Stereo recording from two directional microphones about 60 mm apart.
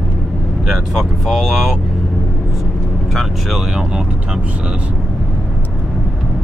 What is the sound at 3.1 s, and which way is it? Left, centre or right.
Speech, centre.